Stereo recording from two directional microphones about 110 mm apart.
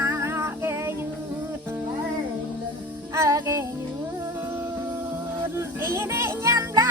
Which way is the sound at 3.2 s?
30° right (ahead or behind).